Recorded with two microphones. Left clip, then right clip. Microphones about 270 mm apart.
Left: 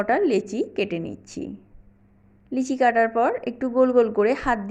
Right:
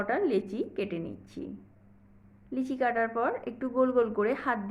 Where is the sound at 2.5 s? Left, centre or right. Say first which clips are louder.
Left 9 dB; left.